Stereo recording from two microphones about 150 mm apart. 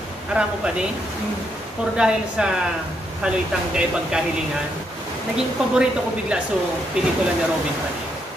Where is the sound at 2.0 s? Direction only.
5° right (ahead or behind).